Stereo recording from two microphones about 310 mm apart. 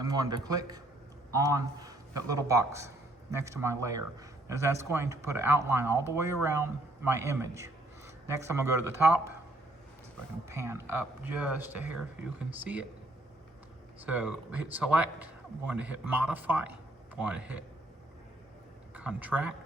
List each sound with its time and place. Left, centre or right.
0.0 s a man's voice: centre
10.5 s speech: centre
14.0 s speech: centre
18.9 s speech: centre